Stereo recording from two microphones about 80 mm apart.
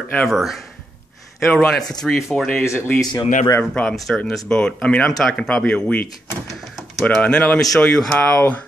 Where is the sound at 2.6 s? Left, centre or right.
Left.